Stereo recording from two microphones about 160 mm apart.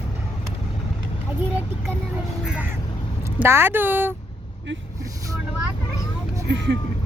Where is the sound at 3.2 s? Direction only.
15° right (ahead or behind).